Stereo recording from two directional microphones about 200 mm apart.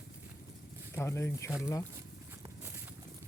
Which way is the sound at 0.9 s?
15° left (ahead or behind).